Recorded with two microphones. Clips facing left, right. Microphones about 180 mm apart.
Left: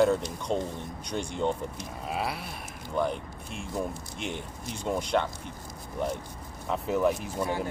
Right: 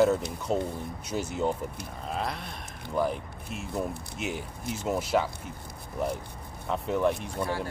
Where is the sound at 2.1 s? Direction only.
5° left (ahead or behind).